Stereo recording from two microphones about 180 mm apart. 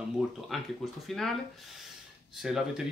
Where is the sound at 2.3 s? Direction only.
5° right (ahead or behind).